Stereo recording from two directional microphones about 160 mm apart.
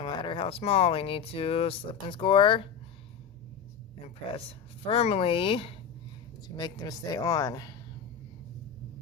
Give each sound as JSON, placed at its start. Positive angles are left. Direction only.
{"t": 0.0, "sound": "speech", "side_deg": 30}
{"t": 4.9, "sound": "speech", "side_deg": 40}